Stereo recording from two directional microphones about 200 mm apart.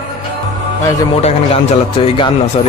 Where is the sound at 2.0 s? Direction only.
25° left (ahead or behind).